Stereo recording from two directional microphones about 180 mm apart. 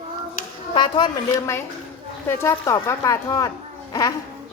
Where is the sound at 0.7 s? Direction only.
25° left (ahead or behind).